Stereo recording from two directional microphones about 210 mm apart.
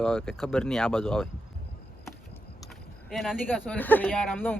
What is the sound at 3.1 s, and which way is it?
Speech, centre (ahead or behind).